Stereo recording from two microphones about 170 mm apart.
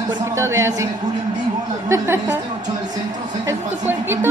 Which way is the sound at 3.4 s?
15° right (ahead or behind).